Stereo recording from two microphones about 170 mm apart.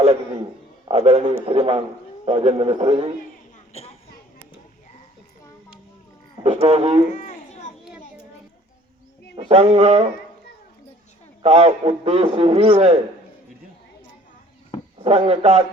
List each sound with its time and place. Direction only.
0.9 s a man's voice: 35° right (ahead or behind)
3.7 s a sound: 40° left (ahead or behind)
6.4 s a man's voice: 35° right (ahead or behind)
7.1 s a sound: 45° left (ahead or behind)
9.3 s a man's voice: 35° right (ahead or behind)
11.4 s a man's voice: 35° right (ahead or behind)
14.9 s a man's voice: 35° right (ahead or behind)